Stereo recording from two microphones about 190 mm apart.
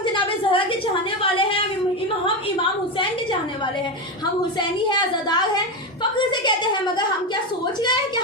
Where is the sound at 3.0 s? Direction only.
25° left (ahead or behind).